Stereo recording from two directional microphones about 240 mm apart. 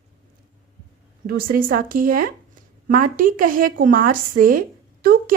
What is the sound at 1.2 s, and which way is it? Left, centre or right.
Speech, right.